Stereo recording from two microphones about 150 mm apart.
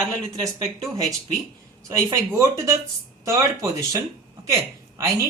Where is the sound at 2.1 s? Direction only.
20° right (ahead or behind).